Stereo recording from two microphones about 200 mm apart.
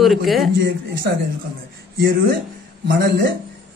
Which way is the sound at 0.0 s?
Centre (ahead or behind).